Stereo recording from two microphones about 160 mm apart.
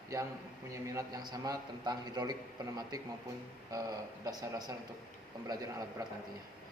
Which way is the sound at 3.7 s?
25° right (ahead or behind).